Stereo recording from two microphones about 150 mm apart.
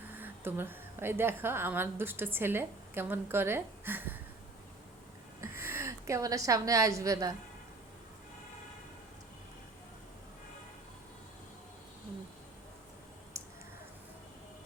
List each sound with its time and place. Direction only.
0.1 s a woman's voice: 15° right (ahead or behind)
5.4 s a woman's voice: 15° right (ahead or behind)